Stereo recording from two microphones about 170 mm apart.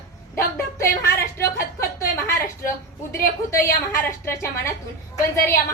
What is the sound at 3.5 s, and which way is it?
A woman's voice, 15° left (ahead or behind).